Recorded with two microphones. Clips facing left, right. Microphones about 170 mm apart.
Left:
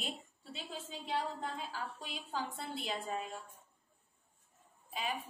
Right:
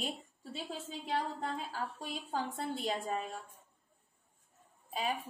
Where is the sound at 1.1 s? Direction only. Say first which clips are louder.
Right 2 dB; 40° right (ahead or behind).